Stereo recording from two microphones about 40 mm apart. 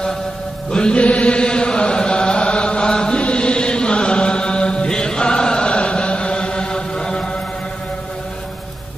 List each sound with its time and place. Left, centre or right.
0.7 s music: left
1.0 s chant: left